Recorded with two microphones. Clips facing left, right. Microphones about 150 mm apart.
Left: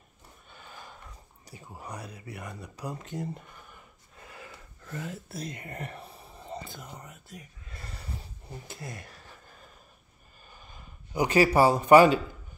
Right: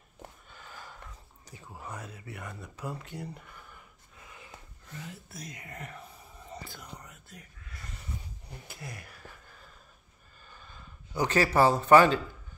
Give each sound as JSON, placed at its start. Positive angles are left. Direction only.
{"t": 0.5, "sound": "a sound", "side_deg": 20}
{"t": 1.6, "sound": "speech", "side_deg": 15}
{"t": 2.1, "sound": "speech", "side_deg": 35}
{"t": 4.2, "sound": "wheeze", "side_deg": 70}
{"t": 5.3, "sound": "speech", "side_deg": 30}
{"t": 7.8, "sound": "a sound", "side_deg": 35}
{"t": 8.6, "sound": "speech", "side_deg": 25}
{"t": 10.5, "sound": "speech", "side_deg": 15}